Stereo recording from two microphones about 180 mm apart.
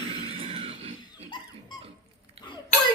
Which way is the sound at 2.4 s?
35° right (ahead or behind).